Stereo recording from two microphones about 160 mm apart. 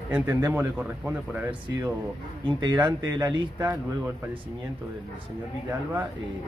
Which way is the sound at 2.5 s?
30° right (ahead or behind).